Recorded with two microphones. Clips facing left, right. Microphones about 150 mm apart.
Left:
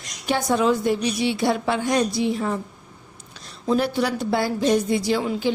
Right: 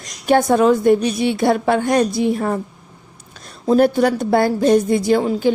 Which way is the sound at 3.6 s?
50° right (ahead or behind).